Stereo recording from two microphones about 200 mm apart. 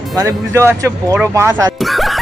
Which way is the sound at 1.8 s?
Centre (ahead or behind).